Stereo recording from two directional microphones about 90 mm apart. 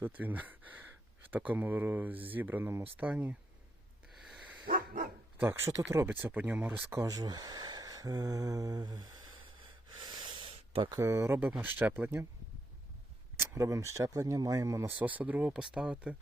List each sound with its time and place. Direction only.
0.0 s speech: 20° right (ahead or behind)
4.3 s dog: 10° right (ahead or behind)
5.4 s speech: 25° right (ahead or behind)
6.1 s speech: 20° right (ahead or behind)
7.0 s speech: 45° right (ahead or behind)
9.9 s a sound: 55° right (ahead or behind); by 10.9 s 90° right
11.0 s speech: 30° right (ahead or behind)
13.4 s speech: 30° right (ahead or behind)
14.8 s speech: 20° right (ahead or behind)